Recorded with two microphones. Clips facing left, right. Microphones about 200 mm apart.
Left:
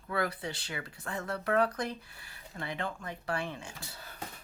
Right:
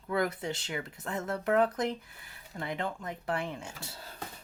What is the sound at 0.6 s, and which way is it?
Speech, 20° right (ahead or behind).